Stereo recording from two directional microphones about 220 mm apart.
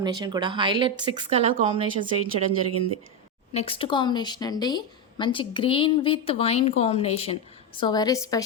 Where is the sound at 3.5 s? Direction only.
25° left (ahead or behind).